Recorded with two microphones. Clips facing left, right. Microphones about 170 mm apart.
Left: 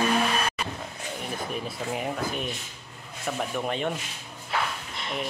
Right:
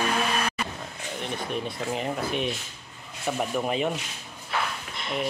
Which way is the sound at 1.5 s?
Centre (ahead or behind).